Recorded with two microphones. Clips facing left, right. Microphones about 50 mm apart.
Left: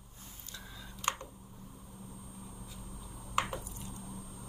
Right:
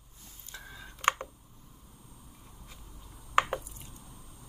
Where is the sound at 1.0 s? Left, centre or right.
Right.